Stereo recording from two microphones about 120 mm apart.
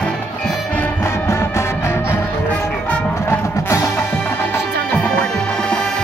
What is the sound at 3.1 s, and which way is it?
Music, 20° left (ahead or behind).